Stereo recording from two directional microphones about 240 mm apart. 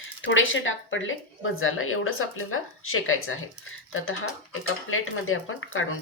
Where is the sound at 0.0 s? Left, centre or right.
Left.